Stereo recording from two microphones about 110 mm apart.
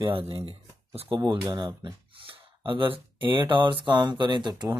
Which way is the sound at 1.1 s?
50° right (ahead or behind).